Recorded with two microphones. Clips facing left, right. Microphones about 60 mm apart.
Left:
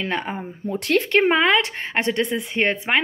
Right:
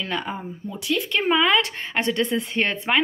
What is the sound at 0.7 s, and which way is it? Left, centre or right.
Speech, left.